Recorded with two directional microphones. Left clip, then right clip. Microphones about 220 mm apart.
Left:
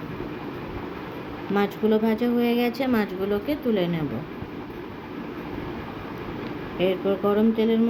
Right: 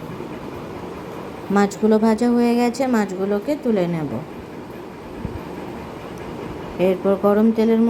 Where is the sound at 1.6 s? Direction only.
20° right (ahead or behind).